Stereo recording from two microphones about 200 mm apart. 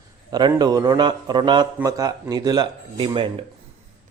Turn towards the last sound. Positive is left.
turn(degrees=-25)  # may be behind; listen again after turning